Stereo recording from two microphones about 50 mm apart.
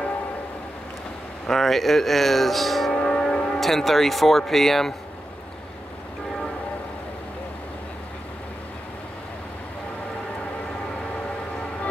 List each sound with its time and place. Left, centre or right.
1.5 s speech: centre
2.9 s music: centre
3.5 s speech: centre